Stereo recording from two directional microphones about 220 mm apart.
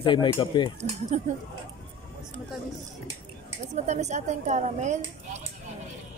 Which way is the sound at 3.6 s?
30° right (ahead or behind).